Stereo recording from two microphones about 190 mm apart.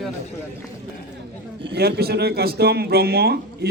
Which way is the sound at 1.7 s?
60° right (ahead or behind).